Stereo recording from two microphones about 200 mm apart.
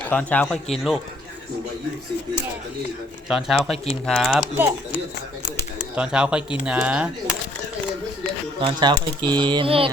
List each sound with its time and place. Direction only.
0.0 s speech: 5° left (ahead or behind)
3.2 s speech: centre (ahead or behind)
6.0 s speech: 5° right (ahead or behind)
8.6 s speech: 20° right (ahead or behind)